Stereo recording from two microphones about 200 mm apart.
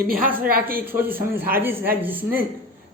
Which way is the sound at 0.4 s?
45° right (ahead or behind).